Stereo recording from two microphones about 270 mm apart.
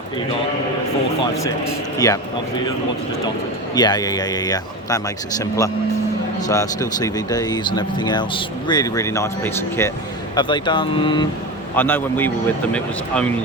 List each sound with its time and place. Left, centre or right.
2.0 s speech: centre
3.8 s speech: centre
11.7 s speech: centre